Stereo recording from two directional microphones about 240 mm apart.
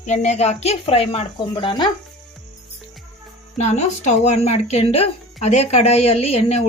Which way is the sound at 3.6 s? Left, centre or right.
Left.